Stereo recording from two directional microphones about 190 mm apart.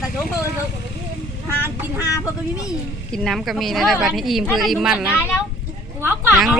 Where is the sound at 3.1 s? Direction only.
Centre (ahead or behind).